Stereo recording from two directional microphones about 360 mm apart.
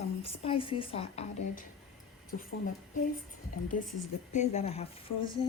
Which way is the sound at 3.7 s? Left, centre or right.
Left.